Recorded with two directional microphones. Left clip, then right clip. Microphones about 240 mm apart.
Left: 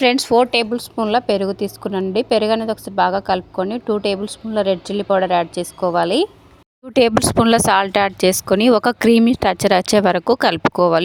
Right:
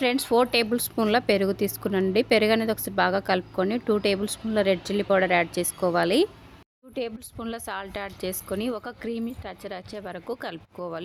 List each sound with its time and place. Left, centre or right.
0.0 s a woman's voice: left; by 6.2 s centre
6.9 s a woman's voice: left